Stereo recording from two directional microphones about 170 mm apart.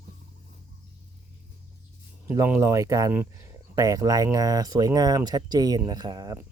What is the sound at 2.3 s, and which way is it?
Speech, 15° right (ahead or behind).